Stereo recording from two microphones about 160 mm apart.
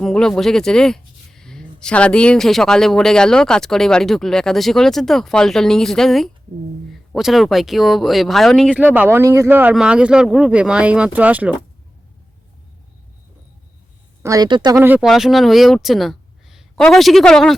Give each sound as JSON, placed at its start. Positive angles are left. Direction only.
{"t": 0.0, "sound": "speech", "side_deg": 5}
{"t": 9.0, "sound": "speech", "side_deg": -15}
{"t": 14.2, "sound": "speech", "side_deg": -20}
{"t": 14.8, "sound": "speech", "side_deg": -10}
{"t": 15.1, "sound": "speech", "side_deg": 0}